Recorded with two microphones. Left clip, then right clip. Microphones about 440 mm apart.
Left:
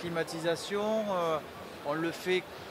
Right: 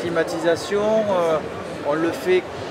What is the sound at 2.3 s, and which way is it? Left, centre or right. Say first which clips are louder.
Speech: right 11 dB; left.